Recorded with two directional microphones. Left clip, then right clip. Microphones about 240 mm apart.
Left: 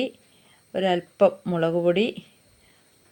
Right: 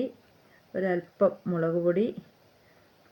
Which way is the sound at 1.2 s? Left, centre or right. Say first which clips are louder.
Left 5 dB; left.